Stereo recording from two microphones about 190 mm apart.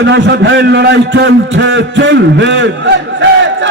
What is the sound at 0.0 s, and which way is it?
A man's voice, 65° right (ahead or behind).